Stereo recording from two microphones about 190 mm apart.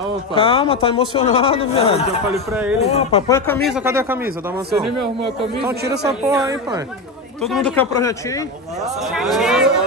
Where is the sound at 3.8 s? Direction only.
10° right (ahead or behind).